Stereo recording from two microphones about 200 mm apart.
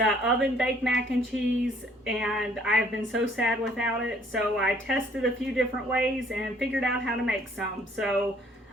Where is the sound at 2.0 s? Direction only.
Centre (ahead or behind).